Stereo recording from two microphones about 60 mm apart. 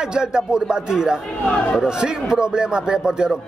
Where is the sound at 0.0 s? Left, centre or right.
Centre.